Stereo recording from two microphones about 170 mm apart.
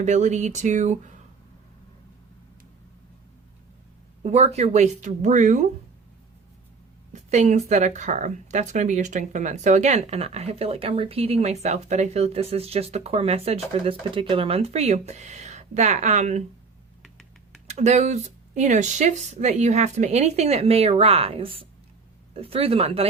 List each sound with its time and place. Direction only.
0.0 s speech: 45° right (ahead or behind)
4.2 s speech: 40° right (ahead or behind)
7.1 s a sound: 45° right (ahead or behind)
7.7 s speech: 45° right (ahead or behind)
17.7 s speech: 40° right (ahead or behind)